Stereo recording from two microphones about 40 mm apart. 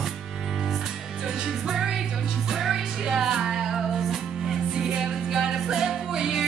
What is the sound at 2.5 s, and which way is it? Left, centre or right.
Music, centre.